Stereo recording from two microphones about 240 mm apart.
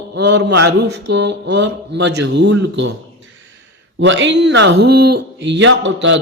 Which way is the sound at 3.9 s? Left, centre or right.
Right.